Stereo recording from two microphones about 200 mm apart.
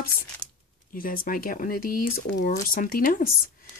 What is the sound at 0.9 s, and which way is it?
Speech, 45° left (ahead or behind).